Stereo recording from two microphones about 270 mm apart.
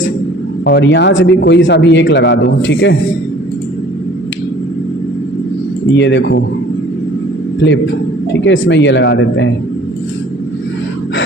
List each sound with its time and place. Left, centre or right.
0.6 s a man's voice: left
5.9 s a man's voice: left
8.3 s a man's voice: left